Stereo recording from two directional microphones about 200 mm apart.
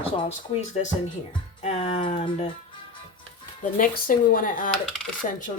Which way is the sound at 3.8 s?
45° left (ahead or behind).